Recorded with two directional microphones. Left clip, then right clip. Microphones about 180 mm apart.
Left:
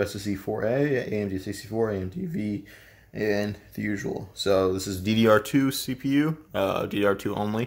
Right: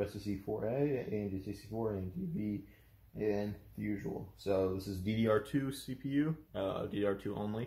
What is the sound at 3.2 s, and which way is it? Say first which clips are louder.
Speech: left 9 dB; 50° left (ahead or behind).